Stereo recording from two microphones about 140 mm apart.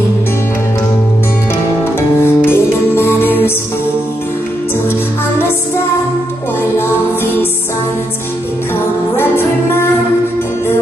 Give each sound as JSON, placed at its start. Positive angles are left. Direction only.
{"t": 2.0, "sound": "music", "side_deg": 15}
{"t": 9.1, "sound": "music", "side_deg": 15}